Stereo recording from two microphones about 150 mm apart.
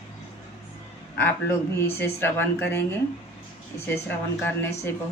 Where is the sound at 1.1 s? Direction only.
15° left (ahead or behind).